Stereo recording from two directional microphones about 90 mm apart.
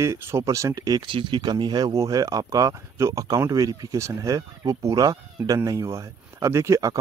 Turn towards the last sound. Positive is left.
turn(degrees=-35)  # may be behind; listen again after turning